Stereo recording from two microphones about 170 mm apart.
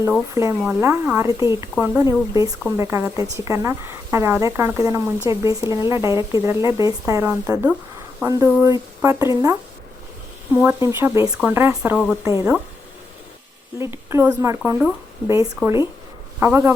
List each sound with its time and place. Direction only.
0.6 s a woman's voice: 10° right (ahead or behind)
12.2 s a woman's voice: 15° right (ahead or behind)
13.7 s a woman's voice: 15° right (ahead or behind)